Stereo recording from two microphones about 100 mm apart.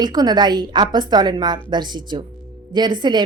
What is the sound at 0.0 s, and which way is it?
A woman's voice, 40° right (ahead or behind).